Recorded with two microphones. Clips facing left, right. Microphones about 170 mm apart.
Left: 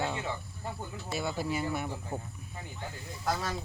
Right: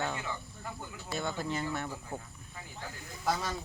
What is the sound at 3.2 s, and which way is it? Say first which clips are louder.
Speech: even; centre (ahead or behind).